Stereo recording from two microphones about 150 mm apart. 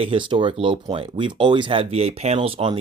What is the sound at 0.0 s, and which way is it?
Speech, 35° right (ahead or behind).